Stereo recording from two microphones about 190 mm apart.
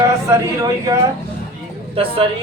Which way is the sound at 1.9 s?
30° right (ahead or behind).